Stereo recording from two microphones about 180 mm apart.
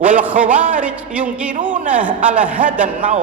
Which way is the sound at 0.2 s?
10° right (ahead or behind).